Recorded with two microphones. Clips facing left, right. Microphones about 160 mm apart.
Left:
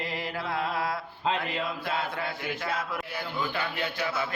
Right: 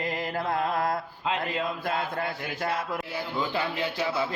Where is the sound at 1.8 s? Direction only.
45° right (ahead or behind).